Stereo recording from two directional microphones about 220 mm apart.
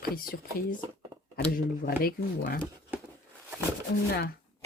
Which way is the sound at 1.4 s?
45° left (ahead or behind).